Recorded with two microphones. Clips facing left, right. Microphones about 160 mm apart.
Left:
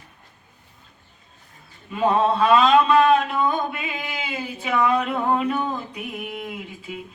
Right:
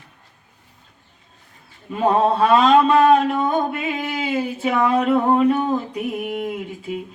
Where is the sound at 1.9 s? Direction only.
40° right (ahead or behind).